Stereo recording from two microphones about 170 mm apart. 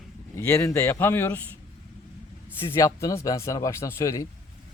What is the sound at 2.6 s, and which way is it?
A man's voice, 15° left (ahead or behind).